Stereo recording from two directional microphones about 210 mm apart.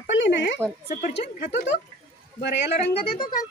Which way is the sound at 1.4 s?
55° left (ahead or behind).